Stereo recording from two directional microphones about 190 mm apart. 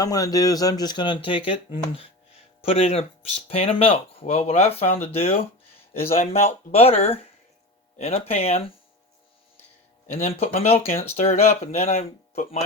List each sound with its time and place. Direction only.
0.0 s speech: 20° left (ahead or behind)
10.1 s speech: 35° left (ahead or behind)